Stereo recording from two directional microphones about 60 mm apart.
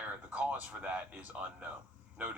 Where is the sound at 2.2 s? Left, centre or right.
Right.